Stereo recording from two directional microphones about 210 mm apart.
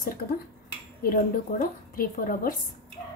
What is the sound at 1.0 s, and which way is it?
A woman's voice, 45° left (ahead or behind).